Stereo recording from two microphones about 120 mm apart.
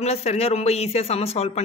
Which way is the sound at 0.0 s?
65° left (ahead or behind).